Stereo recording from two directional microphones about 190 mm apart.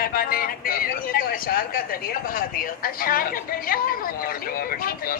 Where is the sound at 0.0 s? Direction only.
50° left (ahead or behind).